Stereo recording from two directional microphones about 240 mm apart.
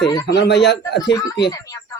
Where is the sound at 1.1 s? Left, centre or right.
Centre.